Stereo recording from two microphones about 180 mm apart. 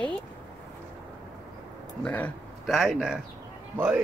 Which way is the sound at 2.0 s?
10° left (ahead or behind).